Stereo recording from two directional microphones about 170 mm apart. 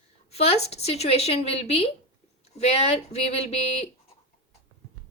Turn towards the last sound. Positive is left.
turn(degrees=40)  # may be behind; listen again after turning